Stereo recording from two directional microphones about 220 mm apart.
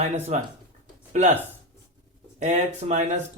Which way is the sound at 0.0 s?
30° right (ahead or behind).